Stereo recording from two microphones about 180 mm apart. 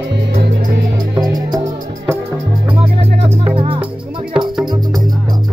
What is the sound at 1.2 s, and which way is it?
Music, 20° right (ahead or behind).